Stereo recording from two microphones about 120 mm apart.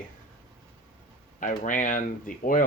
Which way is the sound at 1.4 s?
90° left.